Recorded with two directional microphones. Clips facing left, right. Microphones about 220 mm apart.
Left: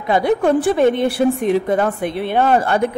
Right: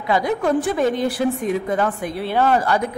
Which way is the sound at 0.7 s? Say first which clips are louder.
Left 5 dB; 65° left (ahead or behind).